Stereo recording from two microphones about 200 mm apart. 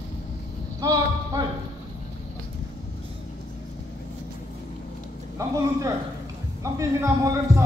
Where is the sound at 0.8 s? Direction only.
15° right (ahead or behind).